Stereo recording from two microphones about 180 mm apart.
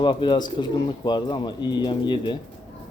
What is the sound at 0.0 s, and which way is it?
Speech, 25° left (ahead or behind).